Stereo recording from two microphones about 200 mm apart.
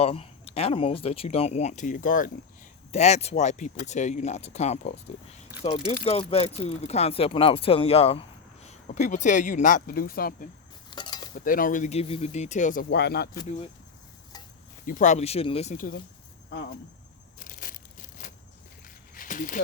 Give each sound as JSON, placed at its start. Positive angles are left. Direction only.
{"t": 0.0, "sound": "speech", "side_deg": 30}
{"t": 10.9, "sound": "cutlery", "side_deg": 20}
{"t": 11.3, "sound": "speech", "side_deg": 45}
{"t": 12.9, "sound": "speech", "side_deg": 55}
{"t": 14.8, "sound": "speech", "side_deg": 40}
{"t": 17.4, "sound": "crushing", "side_deg": 40}
{"t": 19.1, "sound": "a sound", "side_deg": 45}